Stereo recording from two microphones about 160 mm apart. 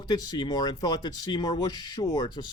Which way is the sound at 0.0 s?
25° left (ahead or behind).